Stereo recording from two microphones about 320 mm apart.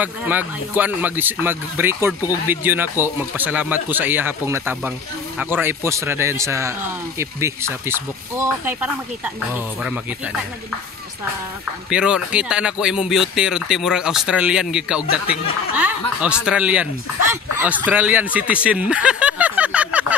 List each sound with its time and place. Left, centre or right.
0.0 s speech: centre
11.9 s speech: centre
15.0 s speech: left
15.7 s speech: centre